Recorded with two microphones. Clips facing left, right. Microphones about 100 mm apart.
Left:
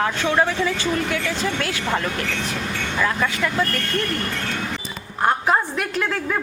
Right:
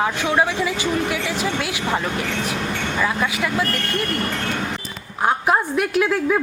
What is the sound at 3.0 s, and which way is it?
Speech, 10° right (ahead or behind).